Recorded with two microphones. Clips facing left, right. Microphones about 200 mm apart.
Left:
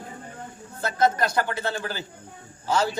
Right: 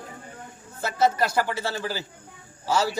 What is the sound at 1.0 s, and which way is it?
A man's voice, 5° right (ahead or behind).